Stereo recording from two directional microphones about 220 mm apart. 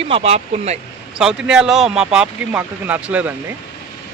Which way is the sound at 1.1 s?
5° right (ahead or behind).